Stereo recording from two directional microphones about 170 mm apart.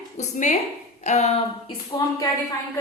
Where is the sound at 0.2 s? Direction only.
40° left (ahead or behind).